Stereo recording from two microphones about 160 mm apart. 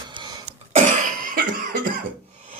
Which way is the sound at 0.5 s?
50° right (ahead or behind).